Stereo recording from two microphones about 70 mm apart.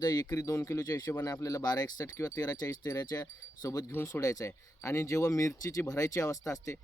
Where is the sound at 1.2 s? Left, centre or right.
Left.